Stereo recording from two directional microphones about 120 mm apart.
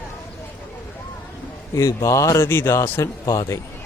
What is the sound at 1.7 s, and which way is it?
Speech, 25° left (ahead or behind).